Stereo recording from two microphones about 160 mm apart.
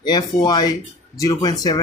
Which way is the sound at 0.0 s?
25° left (ahead or behind).